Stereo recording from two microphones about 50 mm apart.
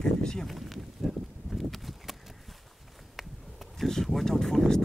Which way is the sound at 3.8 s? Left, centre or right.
Centre.